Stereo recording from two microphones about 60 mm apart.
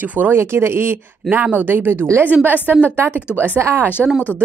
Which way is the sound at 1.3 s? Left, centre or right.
Right.